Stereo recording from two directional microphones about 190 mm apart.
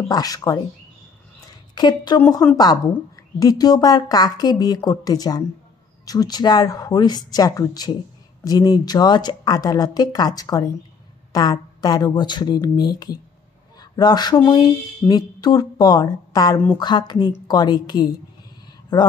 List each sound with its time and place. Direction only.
0.1 s a woman's voice: 20° left (ahead or behind)
1.8 s a woman's voice: 25° left (ahead or behind)
2.1 s a woman's voice: 10° left (ahead or behind)